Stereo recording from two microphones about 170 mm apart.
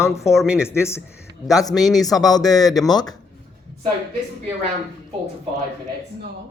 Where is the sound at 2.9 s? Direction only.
25° left (ahead or behind).